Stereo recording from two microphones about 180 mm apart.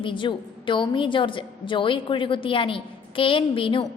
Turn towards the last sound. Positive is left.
turn(degrees=30)  # may be behind; listen again after turning